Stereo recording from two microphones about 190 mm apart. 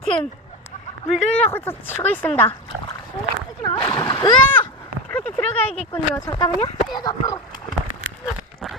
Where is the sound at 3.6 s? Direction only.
25° left (ahead or behind).